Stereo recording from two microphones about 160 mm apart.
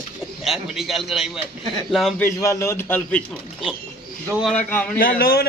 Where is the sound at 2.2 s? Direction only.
20° left (ahead or behind).